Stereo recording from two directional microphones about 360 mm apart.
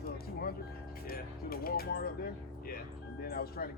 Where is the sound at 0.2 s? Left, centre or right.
Left.